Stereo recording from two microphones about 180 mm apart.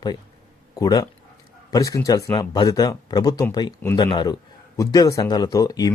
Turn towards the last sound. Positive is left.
turn(degrees=20)  # may be behind; listen again after turning